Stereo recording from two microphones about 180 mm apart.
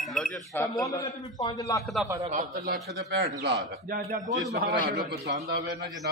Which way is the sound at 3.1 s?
70° right (ahead or behind).